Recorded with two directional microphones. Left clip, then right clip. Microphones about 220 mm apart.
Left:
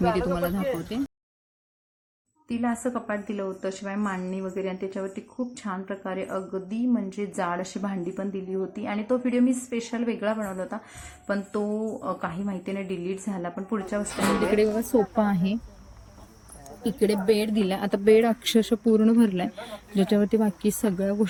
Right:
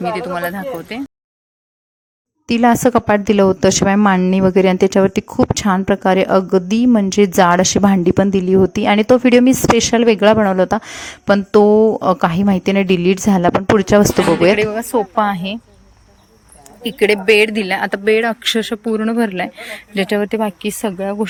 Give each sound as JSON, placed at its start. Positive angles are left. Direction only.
{"t": 0.3, "sound": "speech", "side_deg": 0}
{"t": 2.5, "sound": "a woman's voice", "side_deg": -45}
{"t": 14.5, "sound": "speech", "side_deg": 0}
{"t": 17.5, "sound": "speech", "side_deg": 0}